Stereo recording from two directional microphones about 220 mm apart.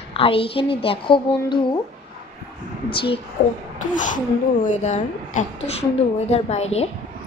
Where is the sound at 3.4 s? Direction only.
40° left (ahead or behind).